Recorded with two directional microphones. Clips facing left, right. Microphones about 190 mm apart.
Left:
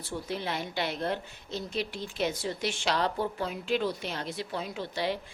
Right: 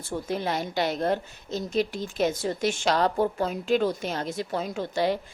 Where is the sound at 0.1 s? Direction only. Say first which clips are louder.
Right 5 dB; 45° right (ahead or behind).